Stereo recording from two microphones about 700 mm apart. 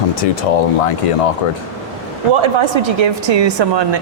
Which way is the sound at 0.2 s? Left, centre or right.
Left.